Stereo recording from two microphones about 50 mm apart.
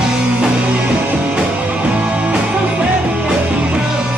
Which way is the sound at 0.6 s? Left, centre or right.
Right.